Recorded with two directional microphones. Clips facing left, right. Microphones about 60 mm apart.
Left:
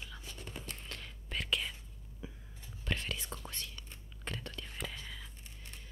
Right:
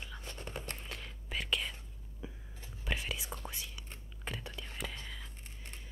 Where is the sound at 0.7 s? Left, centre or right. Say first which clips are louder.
Right 1 dB; centre.